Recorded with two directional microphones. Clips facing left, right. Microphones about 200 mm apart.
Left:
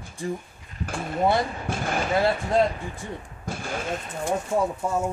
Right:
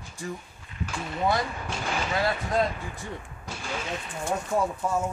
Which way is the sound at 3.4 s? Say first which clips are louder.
Left 4 dB; 50° left (ahead or behind).